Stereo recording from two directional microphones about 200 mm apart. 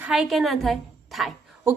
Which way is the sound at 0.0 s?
5° right (ahead or behind).